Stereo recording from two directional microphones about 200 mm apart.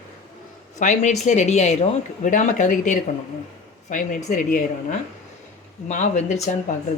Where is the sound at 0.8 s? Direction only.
40° left (ahead or behind).